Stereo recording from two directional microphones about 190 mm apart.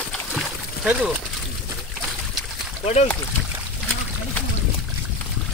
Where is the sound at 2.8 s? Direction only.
35° left (ahead or behind).